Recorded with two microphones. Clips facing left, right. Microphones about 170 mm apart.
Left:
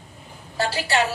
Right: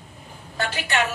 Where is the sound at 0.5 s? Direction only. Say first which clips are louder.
Left 3 dB; 35° left (ahead or behind).